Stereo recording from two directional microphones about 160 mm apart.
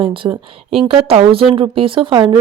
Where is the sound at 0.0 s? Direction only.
30° right (ahead or behind).